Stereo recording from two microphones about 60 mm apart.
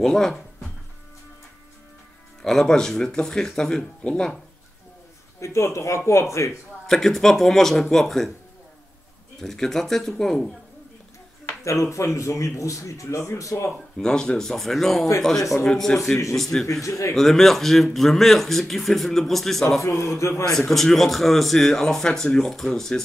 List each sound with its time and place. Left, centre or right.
0.0 s speech: centre
2.4 s speech: centre
5.4 s speech: left
6.9 s a man's voice: centre
9.4 s a man's voice: centre
11.6 s speech: left
13.9 s a man's voice: centre
16.8 s speech: left
17.1 s a man's voice: centre
19.8 s speech: left
20.5 s speech: centre